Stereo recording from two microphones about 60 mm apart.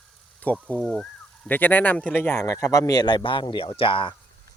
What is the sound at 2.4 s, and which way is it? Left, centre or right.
Speech, left.